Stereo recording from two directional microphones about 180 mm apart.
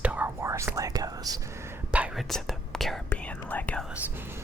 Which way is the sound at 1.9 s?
5° right (ahead or behind).